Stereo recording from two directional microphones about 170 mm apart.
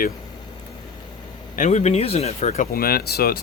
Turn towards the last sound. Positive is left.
turn(degrees=65)  # may be behind; listen again after turning